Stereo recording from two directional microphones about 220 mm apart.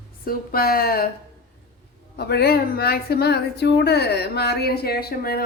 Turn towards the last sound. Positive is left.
turn(degrees=45)  # may be behind; listen again after turning